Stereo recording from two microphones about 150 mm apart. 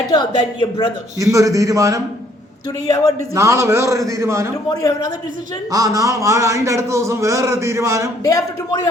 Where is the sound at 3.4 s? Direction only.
20° right (ahead or behind).